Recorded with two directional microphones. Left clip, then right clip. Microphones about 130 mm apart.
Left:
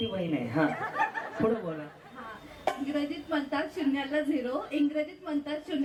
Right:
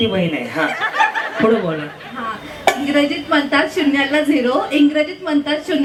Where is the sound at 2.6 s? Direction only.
20° right (ahead or behind).